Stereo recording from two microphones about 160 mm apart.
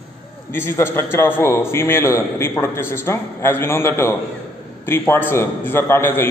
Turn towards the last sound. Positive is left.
turn(degrees=15)  # may be behind; listen again after turning